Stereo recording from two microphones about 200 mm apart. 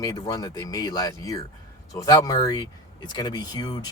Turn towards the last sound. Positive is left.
turn(degrees=20)  # may be behind; listen again after turning